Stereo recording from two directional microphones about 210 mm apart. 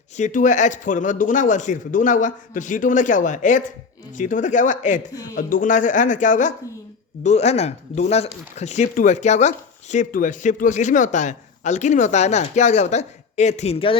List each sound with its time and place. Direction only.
0.2 s speech: 35° left (ahead or behind)